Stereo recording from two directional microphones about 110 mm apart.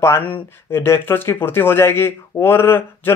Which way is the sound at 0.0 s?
20° left (ahead or behind).